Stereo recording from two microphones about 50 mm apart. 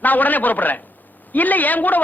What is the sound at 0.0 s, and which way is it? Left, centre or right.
A man's voice, left.